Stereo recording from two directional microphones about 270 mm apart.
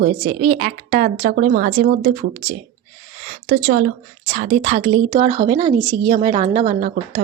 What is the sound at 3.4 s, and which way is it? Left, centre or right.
A woman's voice, right.